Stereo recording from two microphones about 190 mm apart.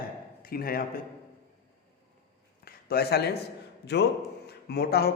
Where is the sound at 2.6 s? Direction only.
55° left (ahead or behind).